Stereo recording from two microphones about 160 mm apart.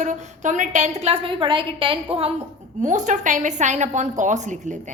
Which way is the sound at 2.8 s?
50° right (ahead or behind).